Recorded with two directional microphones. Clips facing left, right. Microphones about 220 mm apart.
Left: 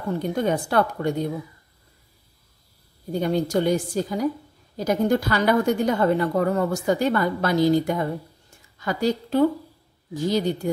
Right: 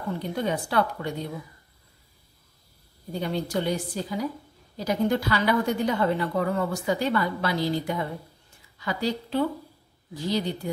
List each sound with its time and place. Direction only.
0.2 s a woman's voice: 45° left (ahead or behind)
3.1 s a woman's voice: 45° left (ahead or behind)